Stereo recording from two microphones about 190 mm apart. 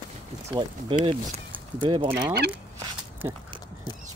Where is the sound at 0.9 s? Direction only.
30° right (ahead or behind).